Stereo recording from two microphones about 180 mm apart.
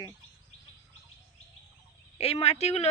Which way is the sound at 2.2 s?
35° left (ahead or behind).